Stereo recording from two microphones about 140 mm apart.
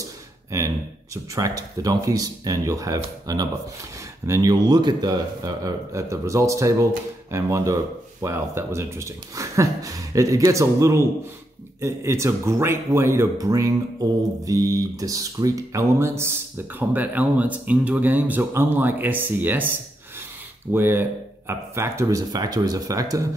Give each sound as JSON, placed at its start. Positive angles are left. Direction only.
{"t": 0.0, "sound": "a sound", "side_deg": -25}
{"t": 1.1, "sound": "speech", "side_deg": -25}
{"t": 20.7, "sound": "speech", "side_deg": -15}